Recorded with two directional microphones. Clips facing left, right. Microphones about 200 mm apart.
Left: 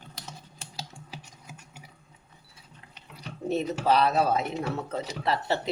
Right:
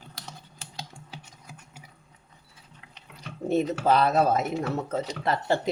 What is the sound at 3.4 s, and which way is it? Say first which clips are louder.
Speech: right 2 dB; 50° right (ahead or behind).